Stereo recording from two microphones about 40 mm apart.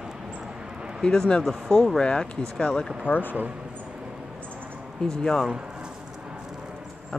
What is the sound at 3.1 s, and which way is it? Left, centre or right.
Speech, left.